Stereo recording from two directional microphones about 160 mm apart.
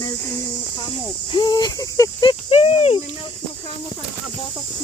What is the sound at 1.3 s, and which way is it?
Speech, 30° left (ahead or behind).